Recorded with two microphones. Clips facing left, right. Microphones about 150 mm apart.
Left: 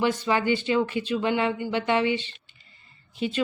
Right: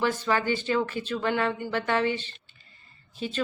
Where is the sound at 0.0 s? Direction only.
15° left (ahead or behind).